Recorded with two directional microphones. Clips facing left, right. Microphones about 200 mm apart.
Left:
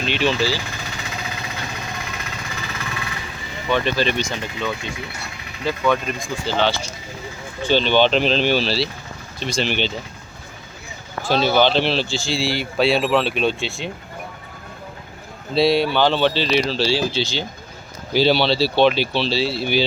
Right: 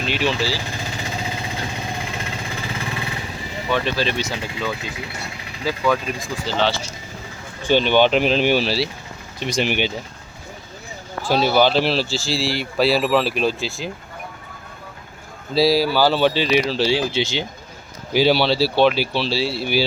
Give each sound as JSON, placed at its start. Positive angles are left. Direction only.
{"t": 0.0, "sound": "speech", "side_deg": -5}
{"t": 0.9, "sound": "vehicle", "side_deg": -30}
{"t": 2.0, "sound": "jackhammer", "side_deg": -30}
{"t": 3.7, "sound": "speech", "side_deg": -5}
{"t": 7.6, "sound": "speech", "side_deg": -15}
{"t": 11.3, "sound": "speech", "side_deg": -5}
{"t": 15.5, "sound": "speech", "side_deg": 0}